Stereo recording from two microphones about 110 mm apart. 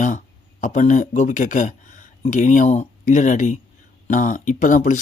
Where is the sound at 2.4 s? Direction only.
90° left.